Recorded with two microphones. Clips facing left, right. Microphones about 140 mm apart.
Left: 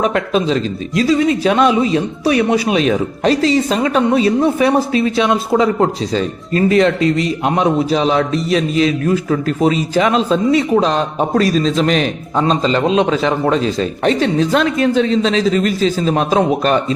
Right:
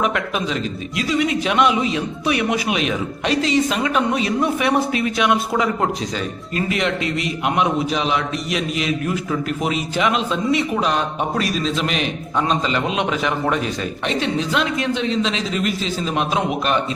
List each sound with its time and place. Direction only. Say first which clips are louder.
0.0 s speech: left 6 dB; 30° left (ahead or behind)
14.0 s speech: left 8 dB; 40° left (ahead or behind)